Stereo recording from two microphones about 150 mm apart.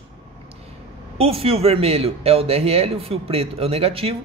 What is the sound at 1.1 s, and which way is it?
Speech, 40° right (ahead or behind).